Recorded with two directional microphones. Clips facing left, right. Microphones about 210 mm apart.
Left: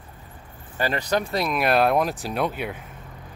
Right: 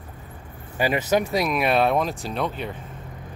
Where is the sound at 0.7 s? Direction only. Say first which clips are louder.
Right 3 dB; 15° right (ahead or behind).